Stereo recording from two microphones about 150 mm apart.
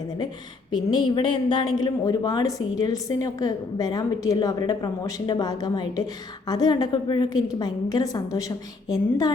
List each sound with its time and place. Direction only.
0.7 s a woman's voice: 30° left (ahead or behind)